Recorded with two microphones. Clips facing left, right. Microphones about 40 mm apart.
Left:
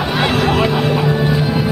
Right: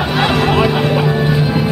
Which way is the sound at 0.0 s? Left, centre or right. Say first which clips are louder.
Right 1 dB; centre.